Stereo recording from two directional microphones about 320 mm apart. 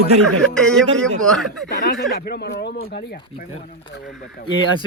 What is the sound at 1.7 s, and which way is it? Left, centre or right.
Speech, left.